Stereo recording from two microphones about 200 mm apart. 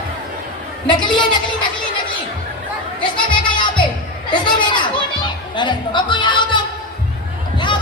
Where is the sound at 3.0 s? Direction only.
25° left (ahead or behind).